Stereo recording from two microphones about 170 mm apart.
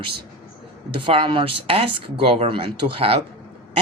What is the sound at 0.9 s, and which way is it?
Speech, 30° right (ahead or behind).